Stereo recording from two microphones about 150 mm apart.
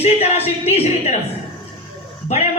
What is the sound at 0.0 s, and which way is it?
Speech, 45° left (ahead or behind).